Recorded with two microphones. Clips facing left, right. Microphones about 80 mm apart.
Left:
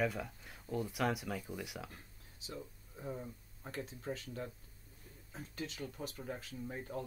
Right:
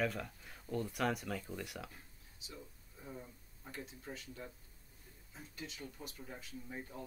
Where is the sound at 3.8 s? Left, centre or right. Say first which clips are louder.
Left 7 dB; left.